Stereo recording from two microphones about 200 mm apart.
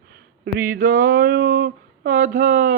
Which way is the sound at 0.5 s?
45° right (ahead or behind).